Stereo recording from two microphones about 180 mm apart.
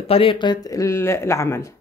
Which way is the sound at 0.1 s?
30° left (ahead or behind).